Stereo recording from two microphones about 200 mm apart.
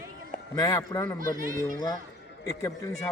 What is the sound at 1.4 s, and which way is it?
Speech, 40° right (ahead or behind).